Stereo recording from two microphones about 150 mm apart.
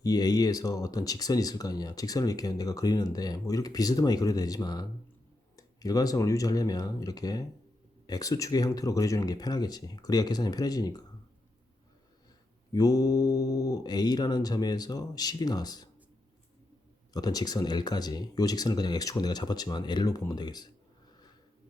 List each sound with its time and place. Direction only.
0.0 s speech: 25° left (ahead or behind)
12.7 s speech: 25° left (ahead or behind)
17.1 s speech: 25° left (ahead or behind)